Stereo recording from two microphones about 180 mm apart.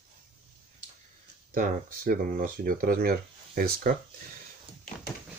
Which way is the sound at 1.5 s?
50° right (ahead or behind).